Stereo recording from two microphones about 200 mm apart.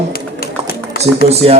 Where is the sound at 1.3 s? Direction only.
30° right (ahead or behind).